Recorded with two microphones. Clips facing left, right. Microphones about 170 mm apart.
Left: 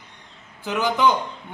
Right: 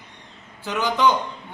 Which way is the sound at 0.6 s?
10° left (ahead or behind).